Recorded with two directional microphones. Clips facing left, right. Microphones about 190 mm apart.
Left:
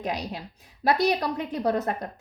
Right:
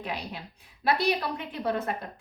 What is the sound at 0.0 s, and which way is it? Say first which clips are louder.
A woman's voice: left 5 dB; 40° left (ahead or behind).